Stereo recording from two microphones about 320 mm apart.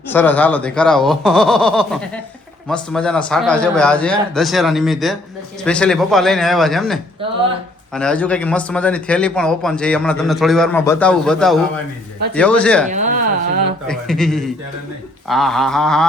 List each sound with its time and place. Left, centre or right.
0.1 s speech: centre
12.9 s a sound: right
13.8 s speech: centre